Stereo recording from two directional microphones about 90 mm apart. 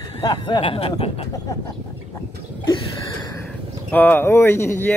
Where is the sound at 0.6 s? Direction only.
90° left.